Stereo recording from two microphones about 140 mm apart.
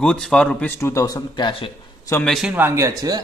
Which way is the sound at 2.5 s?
15° right (ahead or behind).